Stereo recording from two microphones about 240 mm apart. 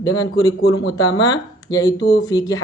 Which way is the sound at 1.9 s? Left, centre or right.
Left.